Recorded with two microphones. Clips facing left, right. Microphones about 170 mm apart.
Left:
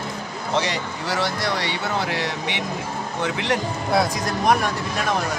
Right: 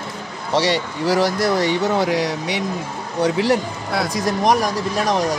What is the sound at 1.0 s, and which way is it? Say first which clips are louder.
Speech: right 7 dB; 40° right (ahead or behind).